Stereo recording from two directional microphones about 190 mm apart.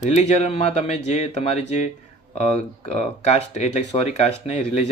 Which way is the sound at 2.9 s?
35° left (ahead or behind).